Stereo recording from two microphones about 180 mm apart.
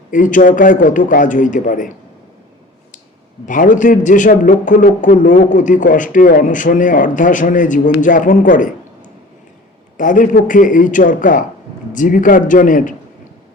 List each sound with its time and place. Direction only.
0.1 s a man's voice: 45° left (ahead or behind)
3.4 s a man's voice: 45° left (ahead or behind)
10.0 s a man's voice: 45° left (ahead or behind)